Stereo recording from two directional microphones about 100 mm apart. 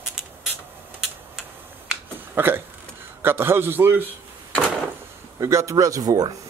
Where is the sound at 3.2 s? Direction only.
25° right (ahead or behind).